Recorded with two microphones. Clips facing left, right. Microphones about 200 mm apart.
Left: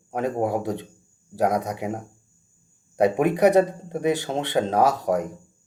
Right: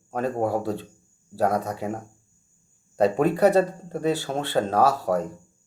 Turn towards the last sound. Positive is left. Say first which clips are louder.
# left 1 dB
turn(degrees=15)  # may be behind; listen again after turning